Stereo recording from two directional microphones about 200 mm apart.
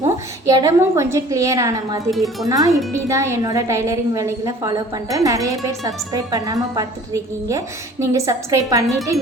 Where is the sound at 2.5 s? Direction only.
15° right (ahead or behind).